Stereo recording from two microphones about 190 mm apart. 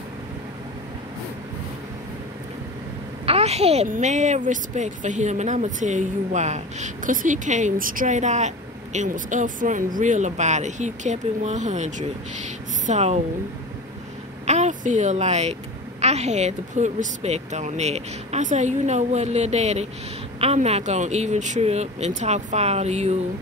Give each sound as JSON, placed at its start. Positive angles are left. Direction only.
{"t": 3.3, "sound": "a woman's voice", "side_deg": -35}
{"t": 14.4, "sound": "a woman's voice", "side_deg": -35}